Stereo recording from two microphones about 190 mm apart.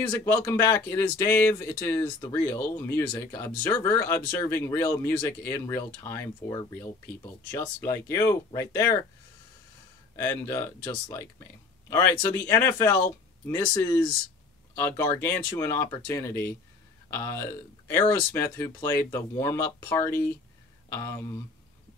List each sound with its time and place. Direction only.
0.1 s speech: 10° left (ahead or behind)
10.1 s speech: 10° left (ahead or behind)
14.8 s speech: 10° left (ahead or behind)